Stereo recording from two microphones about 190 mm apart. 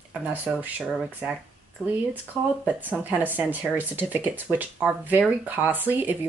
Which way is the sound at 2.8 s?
10° right (ahead or behind).